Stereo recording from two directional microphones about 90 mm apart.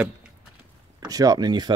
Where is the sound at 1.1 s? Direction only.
45° right (ahead or behind).